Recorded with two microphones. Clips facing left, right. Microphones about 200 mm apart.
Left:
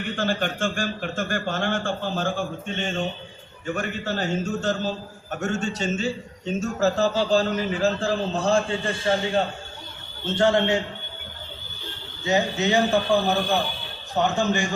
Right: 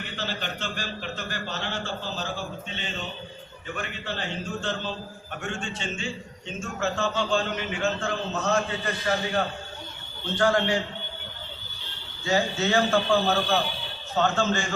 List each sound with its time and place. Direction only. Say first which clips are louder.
0.2 s a man's voice: left 8 dB; 50° left (ahead or behind); by 10.8 s 25° left (ahead or behind)
12.2 s a man's voice: left 2 dB; 20° left (ahead or behind)